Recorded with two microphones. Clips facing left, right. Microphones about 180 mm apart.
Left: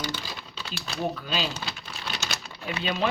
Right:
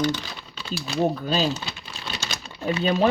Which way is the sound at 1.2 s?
40° right (ahead or behind).